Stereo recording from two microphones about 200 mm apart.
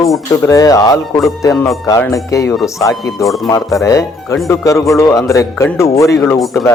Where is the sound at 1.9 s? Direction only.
15° left (ahead or behind).